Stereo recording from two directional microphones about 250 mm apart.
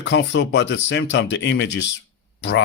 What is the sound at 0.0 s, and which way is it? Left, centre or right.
Speech, left.